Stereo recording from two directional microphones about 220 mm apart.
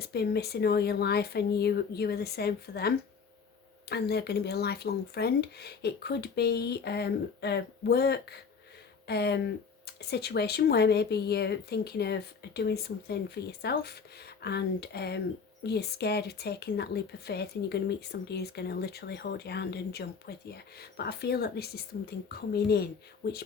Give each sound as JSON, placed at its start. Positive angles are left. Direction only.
{"t": 0.0, "sound": "speech", "side_deg": 45}